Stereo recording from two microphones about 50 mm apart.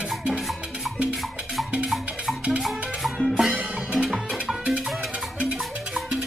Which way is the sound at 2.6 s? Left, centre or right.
Centre.